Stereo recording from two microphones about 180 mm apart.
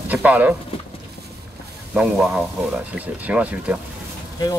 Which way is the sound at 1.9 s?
5° right (ahead or behind).